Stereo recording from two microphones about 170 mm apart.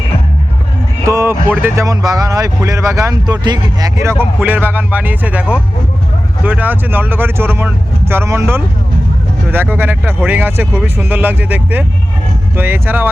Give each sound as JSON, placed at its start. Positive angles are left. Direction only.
{"t": 1.0, "sound": "speech", "side_deg": -15}